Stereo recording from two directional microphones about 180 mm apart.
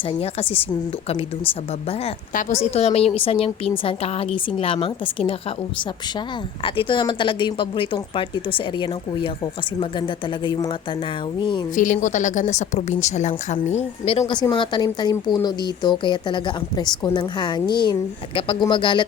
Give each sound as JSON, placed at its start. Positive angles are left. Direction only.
{"t": 0.2, "sound": "a woman's voice", "side_deg": 30}
{"t": 2.6, "sound": "a woman's voice", "side_deg": 35}
{"t": 6.7, "sound": "speech", "side_deg": 30}
{"t": 11.7, "sound": "a woman's voice", "side_deg": 45}